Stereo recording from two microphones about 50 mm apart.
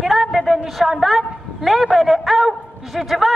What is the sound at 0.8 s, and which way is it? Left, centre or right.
A man's voice, centre.